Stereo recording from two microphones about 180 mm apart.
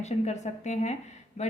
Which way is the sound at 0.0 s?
40° left (ahead or behind).